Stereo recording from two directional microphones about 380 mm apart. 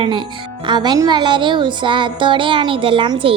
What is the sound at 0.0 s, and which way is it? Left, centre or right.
Speech, centre.